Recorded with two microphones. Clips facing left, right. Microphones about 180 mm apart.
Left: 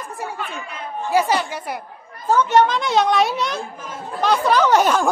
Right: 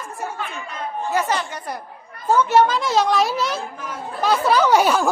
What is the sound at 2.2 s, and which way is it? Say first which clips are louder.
A child's voice: even; 10° right (ahead or behind).